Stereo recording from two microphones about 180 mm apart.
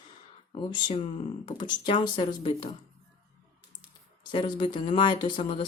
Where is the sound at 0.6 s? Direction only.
30° left (ahead or behind).